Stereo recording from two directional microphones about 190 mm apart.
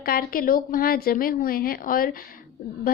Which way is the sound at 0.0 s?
50° left (ahead or behind).